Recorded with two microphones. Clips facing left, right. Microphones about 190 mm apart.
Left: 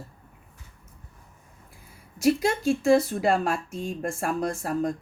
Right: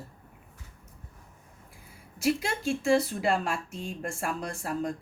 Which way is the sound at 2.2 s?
40° left (ahead or behind).